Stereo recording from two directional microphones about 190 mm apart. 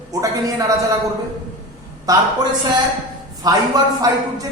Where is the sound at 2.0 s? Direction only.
20° right (ahead or behind).